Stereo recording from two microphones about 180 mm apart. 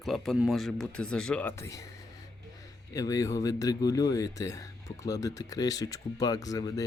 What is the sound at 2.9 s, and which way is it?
Speech, 20° left (ahead or behind).